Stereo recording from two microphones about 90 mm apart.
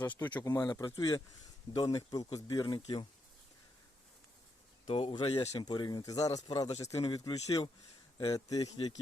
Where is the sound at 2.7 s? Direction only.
65° left (ahead or behind).